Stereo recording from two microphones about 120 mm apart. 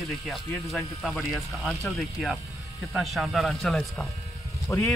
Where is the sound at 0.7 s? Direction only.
Centre (ahead or behind).